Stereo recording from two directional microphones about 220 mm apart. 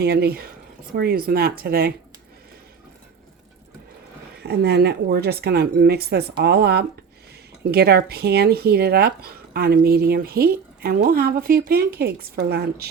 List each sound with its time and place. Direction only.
0.0 s speech: 45° right (ahead or behind)
4.4 s speech: 50° right (ahead or behind)